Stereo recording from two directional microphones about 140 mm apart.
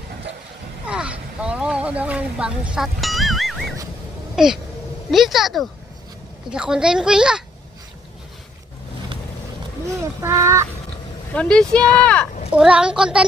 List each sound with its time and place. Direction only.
0.8 s a sound: 10° right (ahead or behind)
4.4 s a child's voice: 5° right (ahead or behind)
9.8 s speech: 20° right (ahead or behind)
11.3 s speech: 5° left (ahead or behind)
12.4 s a child's voice: 5° right (ahead or behind)